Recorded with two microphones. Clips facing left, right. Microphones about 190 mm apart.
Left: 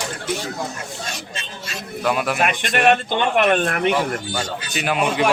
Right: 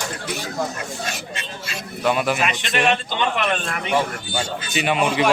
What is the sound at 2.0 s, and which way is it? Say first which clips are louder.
Speech: right 1 dB; centre (ahead or behind).